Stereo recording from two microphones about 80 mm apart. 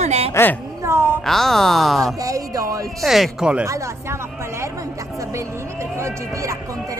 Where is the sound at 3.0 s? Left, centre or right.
Centre.